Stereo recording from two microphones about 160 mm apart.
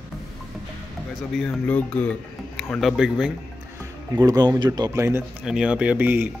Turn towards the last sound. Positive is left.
turn(degrees=-10)  # may be behind; listen again after turning